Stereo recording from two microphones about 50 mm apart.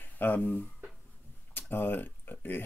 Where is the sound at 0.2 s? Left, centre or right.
Left.